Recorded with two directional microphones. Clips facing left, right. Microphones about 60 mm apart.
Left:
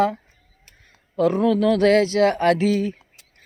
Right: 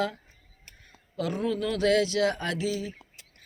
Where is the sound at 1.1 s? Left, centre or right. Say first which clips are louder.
Left 12 dB; left.